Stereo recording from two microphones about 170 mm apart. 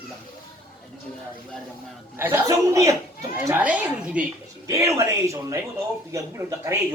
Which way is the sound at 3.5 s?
10° right (ahead or behind).